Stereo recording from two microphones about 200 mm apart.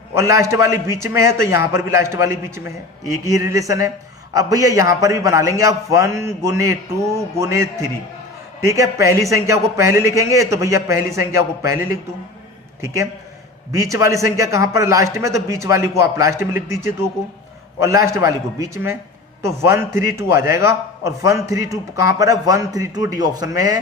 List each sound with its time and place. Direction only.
0.2 s a man's voice: 15° right (ahead or behind)
13.7 s a man's voice: 15° right (ahead or behind)